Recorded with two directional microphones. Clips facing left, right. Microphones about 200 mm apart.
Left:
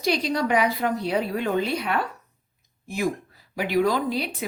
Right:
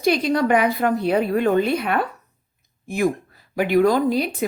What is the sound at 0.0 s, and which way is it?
A woman's voice, 55° right (ahead or behind).